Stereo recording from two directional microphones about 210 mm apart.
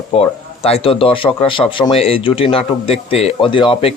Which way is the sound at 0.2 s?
25° left (ahead or behind).